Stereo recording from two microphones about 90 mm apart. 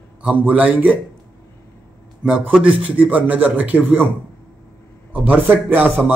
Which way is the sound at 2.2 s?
10° right (ahead or behind).